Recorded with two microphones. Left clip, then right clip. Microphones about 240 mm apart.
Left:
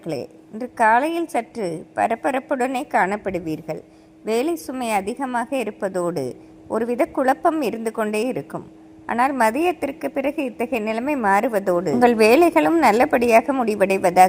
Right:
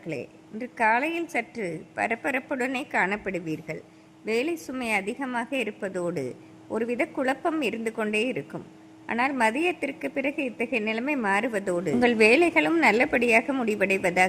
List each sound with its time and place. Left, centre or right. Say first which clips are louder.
0.1 s a woman's voice: left 6 dB; centre
11.6 s a woman's voice: left 7 dB; centre
12.0 s a woman's voice: left 5 dB; centre